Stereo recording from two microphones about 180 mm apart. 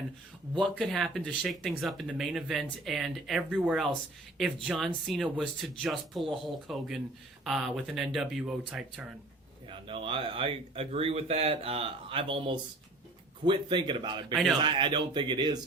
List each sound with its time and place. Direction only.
0.6 s speech: centre (ahead or behind)
9.6 s speech: 30° right (ahead or behind)